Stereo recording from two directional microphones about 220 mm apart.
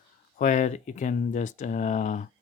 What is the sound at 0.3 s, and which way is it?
Speech, 35° left (ahead or behind).